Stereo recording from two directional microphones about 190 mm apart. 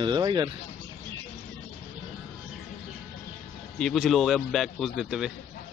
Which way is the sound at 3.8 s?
Centre (ahead or behind).